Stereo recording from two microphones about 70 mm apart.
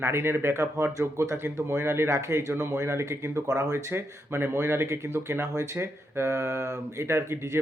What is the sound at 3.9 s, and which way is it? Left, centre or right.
Speech, right.